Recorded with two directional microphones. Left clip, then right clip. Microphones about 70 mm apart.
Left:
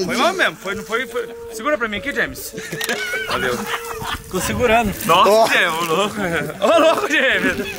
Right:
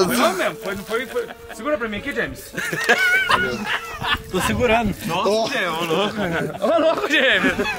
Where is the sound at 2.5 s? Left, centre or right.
Right.